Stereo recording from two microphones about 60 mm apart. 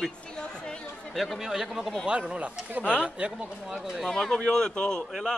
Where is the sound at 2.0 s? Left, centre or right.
Centre.